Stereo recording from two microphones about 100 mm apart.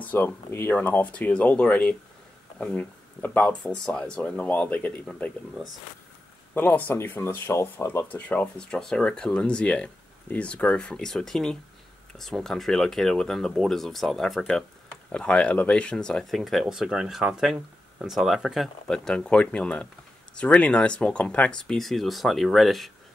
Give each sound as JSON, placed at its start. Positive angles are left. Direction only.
{"t": 0.0, "sound": "speech", "side_deg": 20}
{"t": 6.5, "sound": "speech", "side_deg": 15}
{"t": 8.1, "sound": "speech", "side_deg": 15}